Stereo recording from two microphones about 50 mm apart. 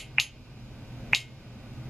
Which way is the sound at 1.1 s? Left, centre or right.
Centre.